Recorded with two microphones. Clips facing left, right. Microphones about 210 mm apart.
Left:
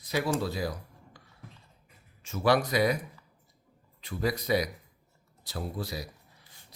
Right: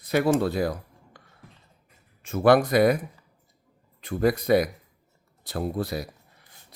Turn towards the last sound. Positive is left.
turn(degrees=-55)  # may be behind; listen again after turning